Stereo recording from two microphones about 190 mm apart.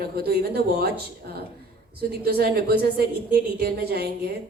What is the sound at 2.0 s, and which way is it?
A woman's voice, 55° right (ahead or behind).